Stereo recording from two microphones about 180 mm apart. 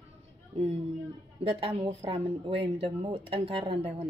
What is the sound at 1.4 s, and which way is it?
A woman's voice, 35° right (ahead or behind).